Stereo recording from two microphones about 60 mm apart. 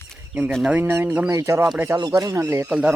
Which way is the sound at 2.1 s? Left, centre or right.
Right.